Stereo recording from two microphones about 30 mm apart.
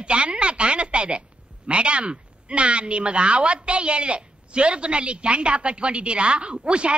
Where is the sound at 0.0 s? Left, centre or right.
Right.